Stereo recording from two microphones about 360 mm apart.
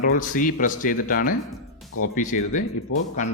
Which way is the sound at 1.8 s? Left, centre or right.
Centre.